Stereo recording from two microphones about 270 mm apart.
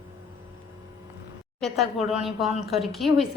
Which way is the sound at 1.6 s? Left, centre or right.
Centre.